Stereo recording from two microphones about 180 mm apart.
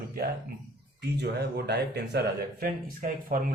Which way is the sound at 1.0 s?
70° right (ahead or behind).